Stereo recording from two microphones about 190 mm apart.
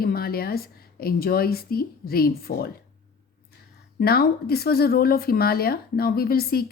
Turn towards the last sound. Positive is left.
turn(degrees=55)  # may be behind; listen again after turning